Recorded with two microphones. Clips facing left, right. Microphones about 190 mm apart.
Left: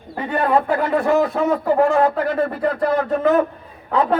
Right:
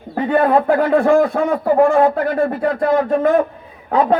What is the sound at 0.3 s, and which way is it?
A man's voice, 40° right (ahead or behind).